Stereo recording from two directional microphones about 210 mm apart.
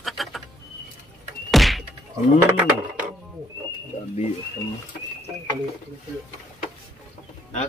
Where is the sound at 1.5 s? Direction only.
Centre (ahead or behind).